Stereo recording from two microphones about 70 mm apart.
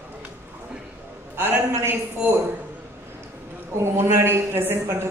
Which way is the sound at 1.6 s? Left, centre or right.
Right.